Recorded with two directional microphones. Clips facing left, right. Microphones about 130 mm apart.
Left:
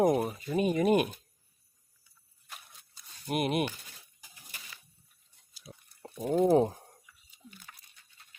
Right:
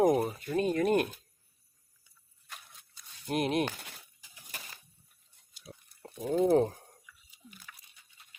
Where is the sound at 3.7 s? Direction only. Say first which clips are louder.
Right 5 dB; 75° right (ahead or behind).